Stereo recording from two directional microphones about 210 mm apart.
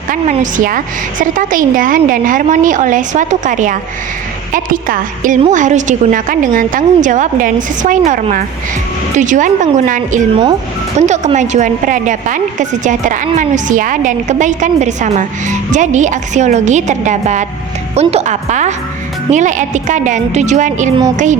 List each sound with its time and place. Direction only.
0.1 s a woman's voice: 40° right (ahead or behind)